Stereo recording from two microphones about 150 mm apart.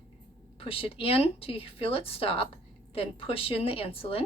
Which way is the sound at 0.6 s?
40° left (ahead or behind).